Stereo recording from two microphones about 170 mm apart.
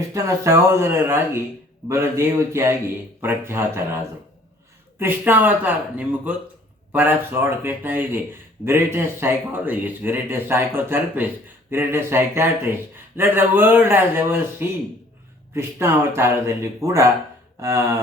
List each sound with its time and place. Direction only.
0.1 s speech: 15° right (ahead or behind)
4.9 s speech: 10° right (ahead or behind)